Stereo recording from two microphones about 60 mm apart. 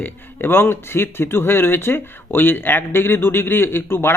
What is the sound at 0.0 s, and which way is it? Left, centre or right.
Speech, left.